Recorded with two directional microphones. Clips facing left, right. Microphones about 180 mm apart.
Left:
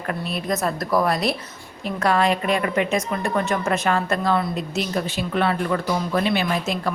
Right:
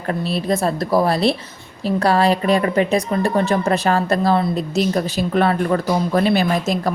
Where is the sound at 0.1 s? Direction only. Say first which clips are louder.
Right 5 dB; 30° right (ahead or behind).